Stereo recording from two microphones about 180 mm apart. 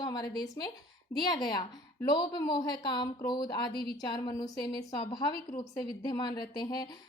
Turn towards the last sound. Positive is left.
turn(degrees=25)  # may be behind; listen again after turning